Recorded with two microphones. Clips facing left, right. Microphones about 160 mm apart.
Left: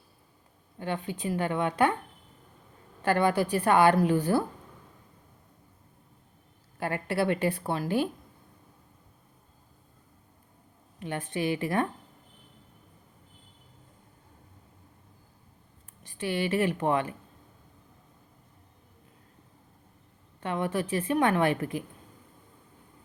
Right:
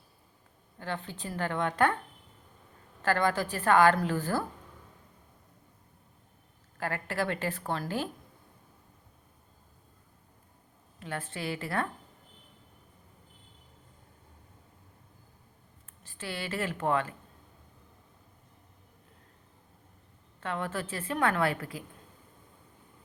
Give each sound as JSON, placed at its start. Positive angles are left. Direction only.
{"t": 0.8, "sound": "a woman's voice", "side_deg": 15}
{"t": 3.0, "sound": "a woman's voice", "side_deg": 15}
{"t": 6.7, "sound": "a woman's voice", "side_deg": 15}
{"t": 11.0, "sound": "a woman's voice", "side_deg": 15}
{"t": 16.0, "sound": "a woman's voice", "side_deg": 15}
{"t": 20.4, "sound": "a woman's voice", "side_deg": 15}